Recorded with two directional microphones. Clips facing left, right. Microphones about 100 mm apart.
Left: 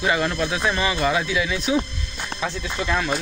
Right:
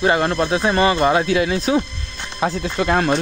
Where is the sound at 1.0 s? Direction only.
40° right (ahead or behind).